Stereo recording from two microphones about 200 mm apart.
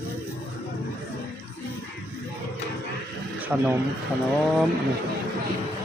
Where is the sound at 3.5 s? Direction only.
5° right (ahead or behind).